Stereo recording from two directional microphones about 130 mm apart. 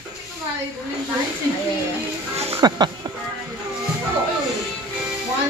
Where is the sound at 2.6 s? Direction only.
30° right (ahead or behind).